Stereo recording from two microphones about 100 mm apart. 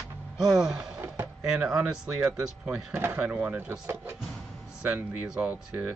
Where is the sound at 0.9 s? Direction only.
20° right (ahead or behind).